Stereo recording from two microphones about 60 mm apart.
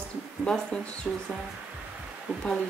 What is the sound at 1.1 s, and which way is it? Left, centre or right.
Speech, centre.